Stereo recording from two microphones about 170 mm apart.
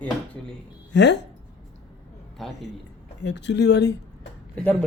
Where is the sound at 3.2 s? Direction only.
90° left.